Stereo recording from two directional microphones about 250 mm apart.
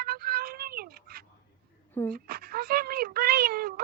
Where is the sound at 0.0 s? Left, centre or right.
Right.